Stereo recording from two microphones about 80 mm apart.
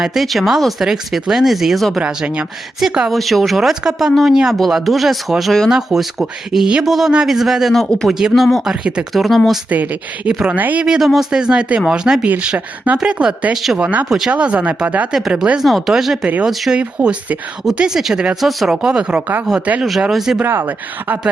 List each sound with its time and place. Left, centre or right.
0.0 s speech: centre
2.0 s a man's voice: centre
3.1 s a man's voice: centre
9.1 s speech: centre
9.6 s speech: centre
10.8 s a man's voice: centre
13.5 s speech: centre
13.7 s a man's voice: centre
15.5 s a man's voice: centre
20.4 s speech: right